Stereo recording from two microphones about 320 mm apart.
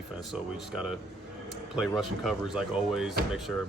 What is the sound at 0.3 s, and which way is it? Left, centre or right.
Speech, centre.